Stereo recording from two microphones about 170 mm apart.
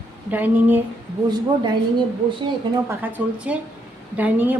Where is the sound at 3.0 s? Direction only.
10° right (ahead or behind).